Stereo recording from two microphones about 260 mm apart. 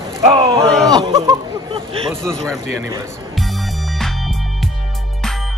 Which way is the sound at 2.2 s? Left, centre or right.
Centre.